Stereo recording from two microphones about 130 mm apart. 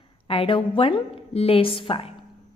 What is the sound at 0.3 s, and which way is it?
A woman's voice, 45° left (ahead or behind).